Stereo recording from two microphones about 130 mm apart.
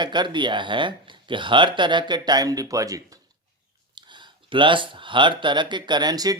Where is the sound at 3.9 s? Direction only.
35° right (ahead or behind).